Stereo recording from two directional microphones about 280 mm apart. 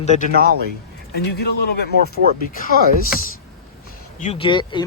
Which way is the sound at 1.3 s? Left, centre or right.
Left.